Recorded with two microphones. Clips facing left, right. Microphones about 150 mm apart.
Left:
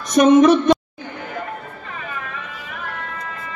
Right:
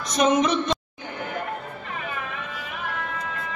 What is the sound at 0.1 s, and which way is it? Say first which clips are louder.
Music: left 9 dB; 55° left (ahead or behind).